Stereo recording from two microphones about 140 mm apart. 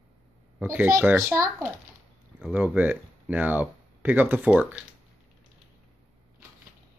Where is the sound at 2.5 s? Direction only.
10° right (ahead or behind).